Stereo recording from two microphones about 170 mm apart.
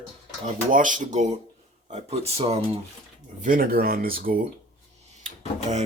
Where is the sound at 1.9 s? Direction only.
35° right (ahead or behind).